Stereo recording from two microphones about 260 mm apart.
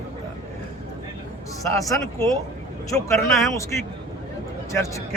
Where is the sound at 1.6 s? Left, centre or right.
Centre.